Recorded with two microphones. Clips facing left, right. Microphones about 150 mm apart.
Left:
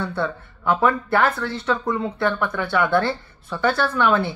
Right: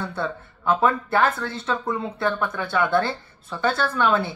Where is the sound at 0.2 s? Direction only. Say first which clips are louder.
Left 2 dB; 25° right (ahead or behind).